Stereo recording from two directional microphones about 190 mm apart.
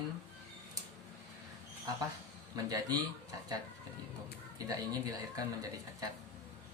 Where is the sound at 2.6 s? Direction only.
20° right (ahead or behind).